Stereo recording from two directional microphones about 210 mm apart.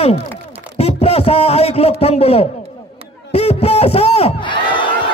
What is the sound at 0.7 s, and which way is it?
A man's voice, 30° left (ahead or behind).